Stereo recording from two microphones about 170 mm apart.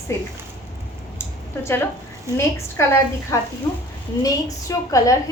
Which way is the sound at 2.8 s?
15° left (ahead or behind).